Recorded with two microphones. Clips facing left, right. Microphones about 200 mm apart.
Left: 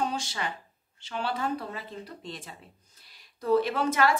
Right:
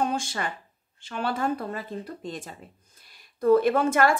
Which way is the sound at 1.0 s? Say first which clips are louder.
Right 3 dB; 50° right (ahead or behind).